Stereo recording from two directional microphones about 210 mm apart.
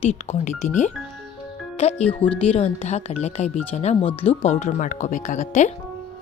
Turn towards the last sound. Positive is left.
turn(degrees=35)  # may be behind; listen again after turning